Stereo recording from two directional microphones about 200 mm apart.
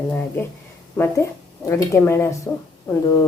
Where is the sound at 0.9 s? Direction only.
10° left (ahead or behind).